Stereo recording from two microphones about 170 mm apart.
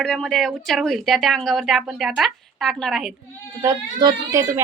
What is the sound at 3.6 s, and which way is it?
Speech, 20° right (ahead or behind).